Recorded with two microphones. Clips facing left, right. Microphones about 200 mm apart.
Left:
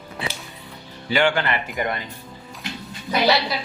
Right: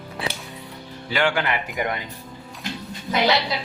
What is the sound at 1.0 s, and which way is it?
Speech, centre (ahead or behind).